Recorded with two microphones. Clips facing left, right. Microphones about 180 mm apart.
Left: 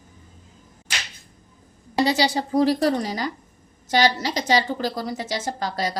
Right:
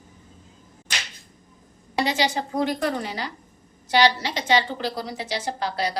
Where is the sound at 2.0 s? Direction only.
35° left (ahead or behind).